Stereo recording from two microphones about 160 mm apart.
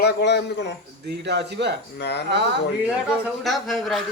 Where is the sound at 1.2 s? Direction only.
90° right.